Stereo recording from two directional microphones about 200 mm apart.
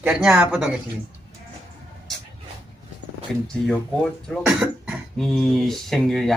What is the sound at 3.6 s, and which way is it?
Speech, centre (ahead or behind).